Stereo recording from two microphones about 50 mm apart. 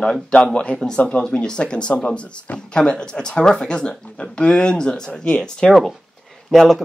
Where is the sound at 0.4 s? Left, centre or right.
Centre.